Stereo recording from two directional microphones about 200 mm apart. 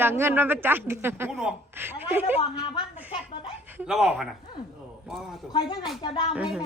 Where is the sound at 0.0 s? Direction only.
10° right (ahead or behind).